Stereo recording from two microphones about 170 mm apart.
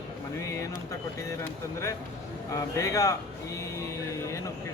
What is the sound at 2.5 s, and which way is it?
Speech, 20° left (ahead or behind).